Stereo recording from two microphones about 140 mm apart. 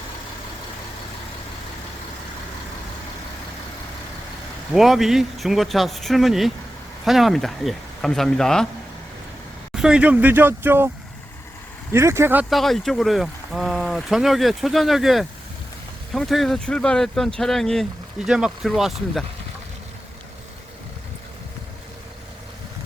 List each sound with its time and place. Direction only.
4.7 s speech: centre (ahead or behind)
9.7 s speech: 5° right (ahead or behind)
12.5 s speech: centre (ahead or behind)